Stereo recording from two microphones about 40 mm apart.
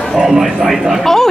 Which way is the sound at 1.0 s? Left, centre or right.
Centre.